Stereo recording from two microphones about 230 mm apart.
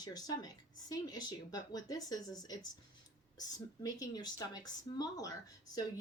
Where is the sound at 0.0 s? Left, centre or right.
Centre.